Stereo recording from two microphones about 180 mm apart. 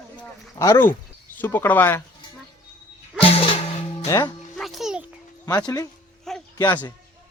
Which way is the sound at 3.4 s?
30° left (ahead or behind).